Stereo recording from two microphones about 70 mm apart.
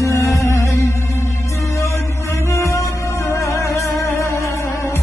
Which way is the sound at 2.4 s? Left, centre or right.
Left.